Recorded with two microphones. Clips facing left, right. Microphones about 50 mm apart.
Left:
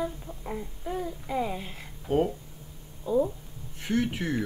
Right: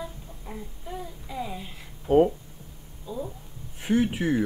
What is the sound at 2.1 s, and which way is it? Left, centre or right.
Speech, centre.